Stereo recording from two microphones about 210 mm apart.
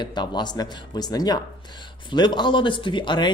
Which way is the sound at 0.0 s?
20° left (ahead or behind).